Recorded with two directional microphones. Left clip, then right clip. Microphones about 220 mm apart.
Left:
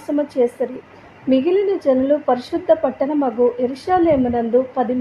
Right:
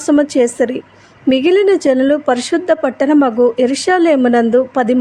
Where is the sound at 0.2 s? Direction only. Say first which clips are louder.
Right 6 dB; 25° right (ahead or behind).